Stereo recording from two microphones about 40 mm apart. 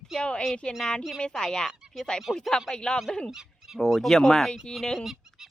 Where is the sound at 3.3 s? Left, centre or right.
Centre.